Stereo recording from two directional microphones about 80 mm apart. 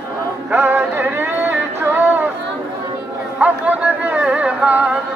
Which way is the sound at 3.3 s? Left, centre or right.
Centre.